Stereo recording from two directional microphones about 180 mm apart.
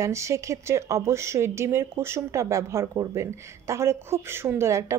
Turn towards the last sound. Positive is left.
turn(degrees=-15)  # may be behind; listen again after turning